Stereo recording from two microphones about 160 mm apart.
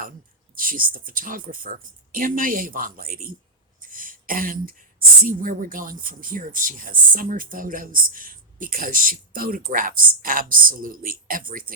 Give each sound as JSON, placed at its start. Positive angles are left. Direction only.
{"t": 0.5, "sound": "speech", "side_deg": -60}